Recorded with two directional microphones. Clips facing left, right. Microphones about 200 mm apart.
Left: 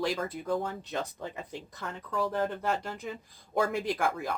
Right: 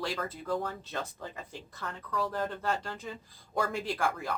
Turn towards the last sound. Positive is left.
turn(degrees=15)  # may be behind; listen again after turning